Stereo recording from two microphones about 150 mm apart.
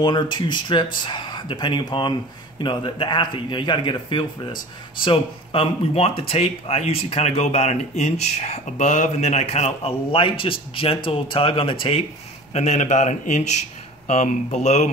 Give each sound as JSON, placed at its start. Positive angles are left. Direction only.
{"t": 0.0, "sound": "a man's voice", "side_deg": 30}
{"t": 12.5, "sound": "speech", "side_deg": 50}